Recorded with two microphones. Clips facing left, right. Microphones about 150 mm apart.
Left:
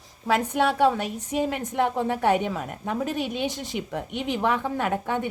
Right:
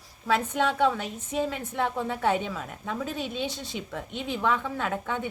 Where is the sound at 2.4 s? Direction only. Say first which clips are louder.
Left 5 dB; 55° left (ahead or behind).